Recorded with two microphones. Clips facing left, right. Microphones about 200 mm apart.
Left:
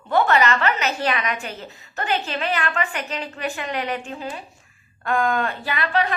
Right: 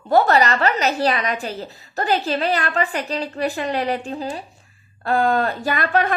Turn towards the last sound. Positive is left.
turn(degrees=-45)  # may be behind; listen again after turning